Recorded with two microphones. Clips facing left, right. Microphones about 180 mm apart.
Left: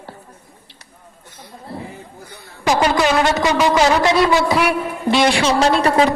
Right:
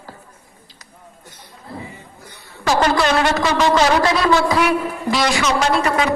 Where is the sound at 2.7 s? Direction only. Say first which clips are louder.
Left 1 dB; 15° left (ahead or behind).